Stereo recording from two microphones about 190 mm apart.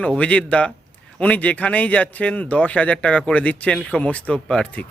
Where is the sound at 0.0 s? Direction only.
5° left (ahead or behind).